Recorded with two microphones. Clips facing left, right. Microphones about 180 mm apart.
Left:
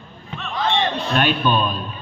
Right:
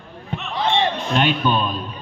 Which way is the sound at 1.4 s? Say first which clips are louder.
Left 1 dB; 20° right (ahead or behind).